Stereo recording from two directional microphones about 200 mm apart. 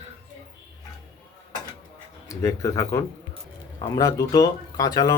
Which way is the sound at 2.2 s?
15° left (ahead or behind).